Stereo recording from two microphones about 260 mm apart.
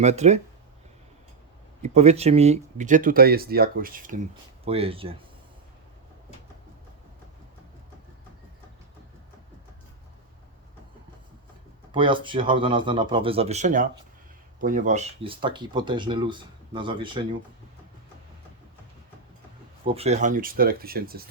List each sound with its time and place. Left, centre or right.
0.0 s speech: right
1.8 s speech: right
4.6 s speech: right
11.9 s speech: centre
19.8 s speech: right